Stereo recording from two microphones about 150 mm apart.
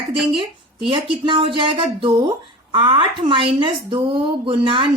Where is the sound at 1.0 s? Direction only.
35° right (ahead or behind).